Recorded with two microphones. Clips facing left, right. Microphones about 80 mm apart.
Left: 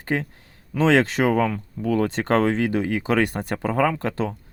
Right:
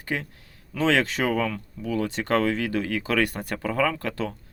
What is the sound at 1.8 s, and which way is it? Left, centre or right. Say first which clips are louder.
Speech: left 5 dB; left.